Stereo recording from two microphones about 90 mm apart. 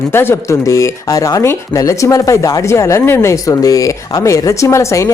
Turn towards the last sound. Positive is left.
turn(degrees=35)  # may be behind; listen again after turning